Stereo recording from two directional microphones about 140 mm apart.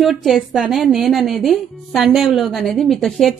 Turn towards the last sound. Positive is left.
turn(degrees=0)  # may be behind; listen again after turning